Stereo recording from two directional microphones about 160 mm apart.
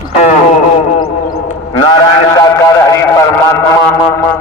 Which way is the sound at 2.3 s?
20° left (ahead or behind).